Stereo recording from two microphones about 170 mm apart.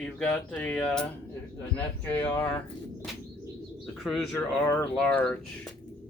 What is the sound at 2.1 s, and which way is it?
Speech, 10° left (ahead or behind).